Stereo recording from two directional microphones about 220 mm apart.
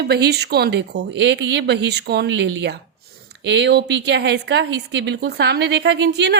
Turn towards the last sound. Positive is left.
turn(degrees=-50)  # may be behind; listen again after turning